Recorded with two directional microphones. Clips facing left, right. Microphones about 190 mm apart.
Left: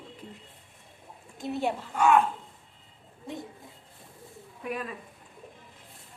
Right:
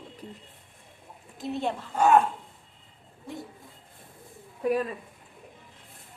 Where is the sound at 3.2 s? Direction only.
20° left (ahead or behind).